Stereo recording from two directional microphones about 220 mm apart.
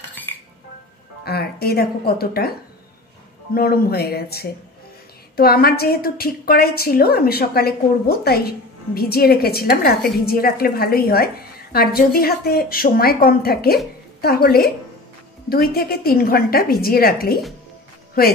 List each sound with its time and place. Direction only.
1.2 s speech: 45° left (ahead or behind)
3.5 s a woman's voice: 45° left (ahead or behind)
15.7 s a woman's voice: 45° left (ahead or behind)